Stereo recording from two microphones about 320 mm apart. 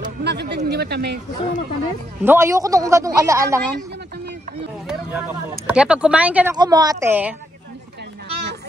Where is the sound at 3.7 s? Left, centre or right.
Right.